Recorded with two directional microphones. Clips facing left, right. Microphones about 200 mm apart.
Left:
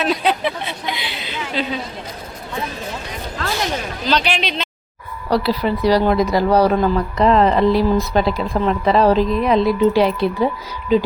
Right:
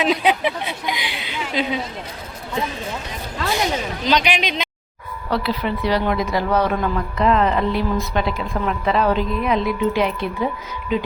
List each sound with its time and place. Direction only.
0.0 s a woman's voice: 15° right (ahead or behind)
4.0 s a woman's voice: 15° right (ahead or behind)
5.3 s speech: 35° left (ahead or behind)